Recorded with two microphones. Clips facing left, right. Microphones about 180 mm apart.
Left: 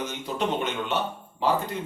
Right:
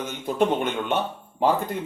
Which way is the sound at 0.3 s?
50° right (ahead or behind).